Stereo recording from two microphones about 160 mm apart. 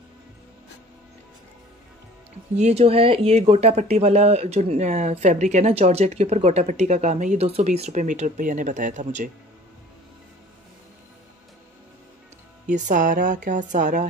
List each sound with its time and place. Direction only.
2.5 s speech: 45° right (ahead or behind)
12.7 s speech: 55° right (ahead or behind)